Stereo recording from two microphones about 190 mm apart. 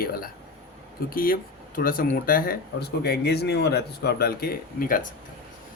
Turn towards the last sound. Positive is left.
turn(degrees=45)  # may be behind; listen again after turning